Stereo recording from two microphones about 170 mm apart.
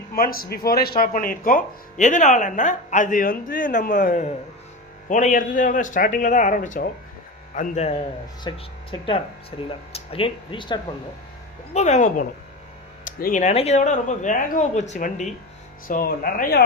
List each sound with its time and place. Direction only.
0.1 s speech: 60° left (ahead or behind); by 10.8 s 30° left (ahead or behind)
11.7 s speech: 45° left (ahead or behind)
15.9 s speech: 60° left (ahead or behind)